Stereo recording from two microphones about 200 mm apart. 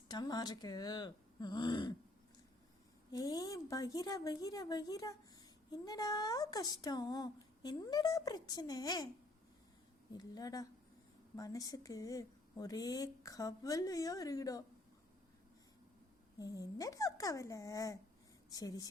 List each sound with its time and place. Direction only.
0.1 s speech: 20° left (ahead or behind)
3.1 s speech: 20° left (ahead or behind)
10.1 s speech: 20° left (ahead or behind)
16.4 s speech: 15° left (ahead or behind)